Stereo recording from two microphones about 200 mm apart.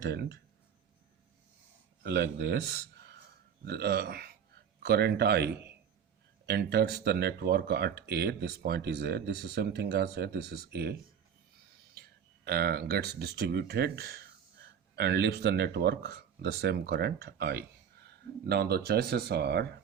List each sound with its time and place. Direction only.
0.0 s speech: 55° right (ahead or behind)
2.0 s a man's voice: 55° right (ahead or behind)
12.5 s speech: 50° right (ahead or behind)